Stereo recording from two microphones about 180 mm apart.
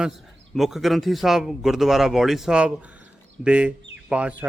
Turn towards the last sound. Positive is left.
turn(degrees=-5)  # may be behind; listen again after turning